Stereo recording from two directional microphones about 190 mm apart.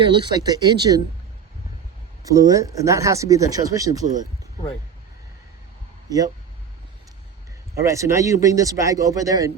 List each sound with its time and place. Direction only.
0.2 s speech: 20° right (ahead or behind)
2.2 s speech: 15° right (ahead or behind)
6.1 s speech: 20° right (ahead or behind)
7.8 s speech: 15° right (ahead or behind)